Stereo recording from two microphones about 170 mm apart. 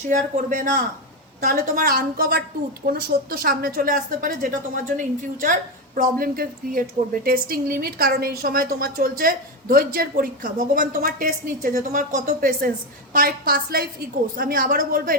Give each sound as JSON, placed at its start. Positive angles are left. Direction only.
{"t": 0.1, "sound": "a woman's voice", "side_deg": -50}